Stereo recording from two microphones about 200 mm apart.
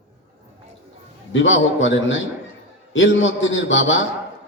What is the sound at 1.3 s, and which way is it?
A man's voice, 70° left (ahead or behind).